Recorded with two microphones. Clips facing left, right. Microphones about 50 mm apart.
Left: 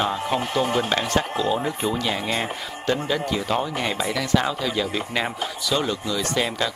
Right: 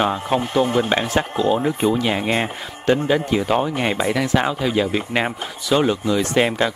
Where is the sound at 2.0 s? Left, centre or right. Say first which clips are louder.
Right 5 dB; right.